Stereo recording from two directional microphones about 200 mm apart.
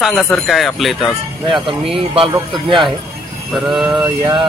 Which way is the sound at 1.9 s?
25° right (ahead or behind).